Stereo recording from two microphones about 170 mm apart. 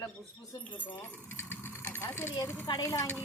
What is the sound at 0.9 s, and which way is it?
A woman's voice, 10° left (ahead or behind).